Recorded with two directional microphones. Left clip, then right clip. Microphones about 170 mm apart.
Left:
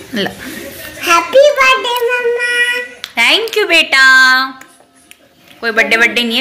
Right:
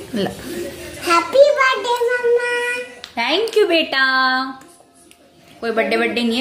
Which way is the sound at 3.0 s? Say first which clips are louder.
Left 9 dB; 10° right (ahead or behind).